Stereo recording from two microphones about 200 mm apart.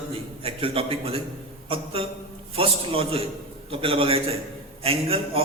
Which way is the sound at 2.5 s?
25° right (ahead or behind).